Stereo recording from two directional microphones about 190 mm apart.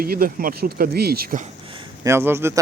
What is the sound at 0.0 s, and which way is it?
Speech, 50° right (ahead or behind).